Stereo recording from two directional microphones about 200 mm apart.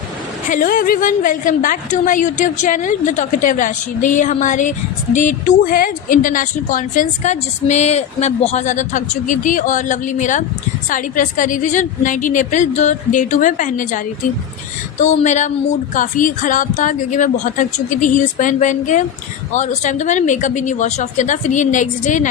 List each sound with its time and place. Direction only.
0.5 s a woman's voice: 45° left (ahead or behind)